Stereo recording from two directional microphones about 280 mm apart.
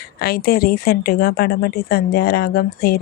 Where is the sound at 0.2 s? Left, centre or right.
Left.